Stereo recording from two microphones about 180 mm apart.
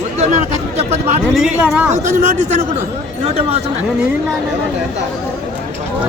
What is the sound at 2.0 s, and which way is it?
A man's voice, 40° right (ahead or behind).